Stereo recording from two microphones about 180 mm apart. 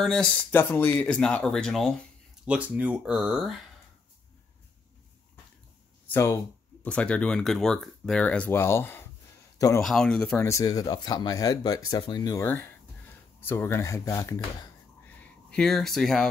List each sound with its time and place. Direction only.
0.0 s speech: 5° left (ahead or behind)
6.0 s speech: 10° left (ahead or behind)
15.1 s speech: 5° left (ahead or behind)